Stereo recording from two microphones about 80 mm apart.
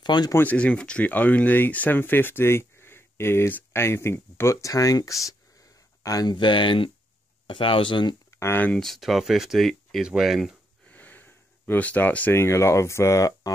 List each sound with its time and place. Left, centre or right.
0.0 s speech: left
0.4 s speech: centre; by 5.3 s left
6.2 s speech: left
8.3 s a sound: left
8.7 s speech: centre
10.9 s a sound: left
12.4 s speech: left